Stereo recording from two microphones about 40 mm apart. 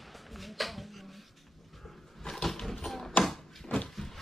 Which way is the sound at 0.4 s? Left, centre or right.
Centre.